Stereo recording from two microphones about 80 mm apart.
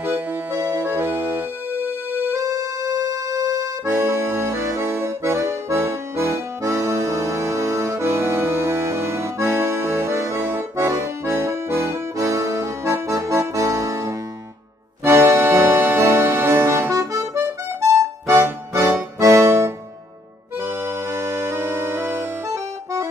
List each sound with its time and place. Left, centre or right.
0.0 s music: right
2.5 s music: right
3.8 s accordion: right
15.0 s music: right